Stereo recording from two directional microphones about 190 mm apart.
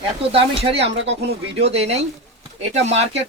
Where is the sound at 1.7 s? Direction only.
35° right (ahead or behind).